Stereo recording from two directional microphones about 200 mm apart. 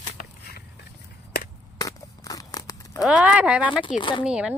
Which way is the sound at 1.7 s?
15° left (ahead or behind).